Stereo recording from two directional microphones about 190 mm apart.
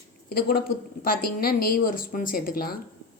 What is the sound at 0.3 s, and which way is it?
Speech, 55° left (ahead or behind).